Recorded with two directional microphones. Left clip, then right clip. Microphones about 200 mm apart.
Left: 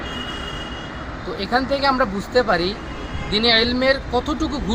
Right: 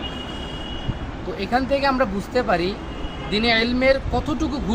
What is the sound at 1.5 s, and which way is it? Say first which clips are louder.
Speech: left 1 dB; 5° left (ahead or behind).